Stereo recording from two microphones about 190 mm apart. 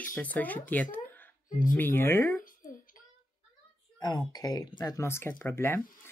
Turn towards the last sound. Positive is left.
turn(degrees=15)  # may be behind; listen again after turning